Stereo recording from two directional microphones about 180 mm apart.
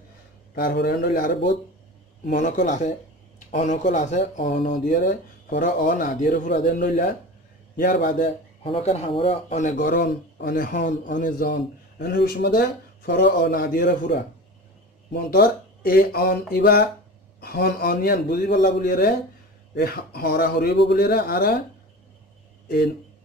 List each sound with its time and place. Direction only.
0.6 s a man's voice: 65° left (ahead or behind)
2.3 s speech: 45° left (ahead or behind)
8.6 s a man's voice: 30° left (ahead or behind); by 21.5 s 60° left (ahead or behind)